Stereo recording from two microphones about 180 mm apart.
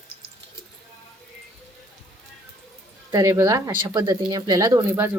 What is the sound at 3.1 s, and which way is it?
A woman's voice, 15° right (ahead or behind).